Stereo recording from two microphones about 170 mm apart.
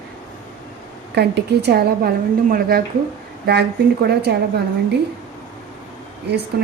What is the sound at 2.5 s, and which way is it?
Speech, 60° right (ahead or behind).